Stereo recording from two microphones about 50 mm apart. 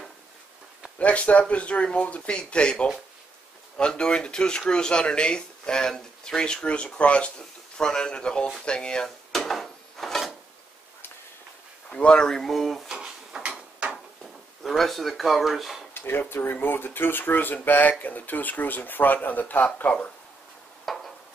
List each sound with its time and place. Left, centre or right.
0.9 s speech: left
9.3 s drawer open or close: centre
11.9 s speech: left
12.3 s speech: centre
12.8 s drawer open or close: centre
14.6 s speech: centre
15.9 s speech: left
20.8 s a sound: centre